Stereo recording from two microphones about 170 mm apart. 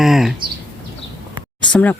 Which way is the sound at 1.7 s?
10° left (ahead or behind).